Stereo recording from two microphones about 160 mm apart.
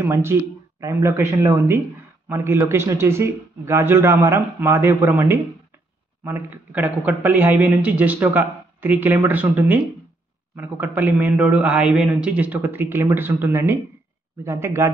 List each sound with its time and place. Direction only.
0.0 s speech: 15° right (ahead or behind)